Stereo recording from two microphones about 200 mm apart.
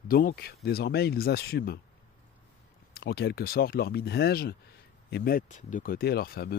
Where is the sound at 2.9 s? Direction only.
55° left (ahead or behind).